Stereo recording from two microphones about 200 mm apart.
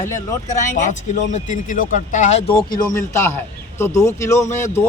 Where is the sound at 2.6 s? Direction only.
20° left (ahead or behind).